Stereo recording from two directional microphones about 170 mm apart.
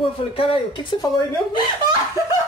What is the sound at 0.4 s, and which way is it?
Speech, 30° left (ahead or behind).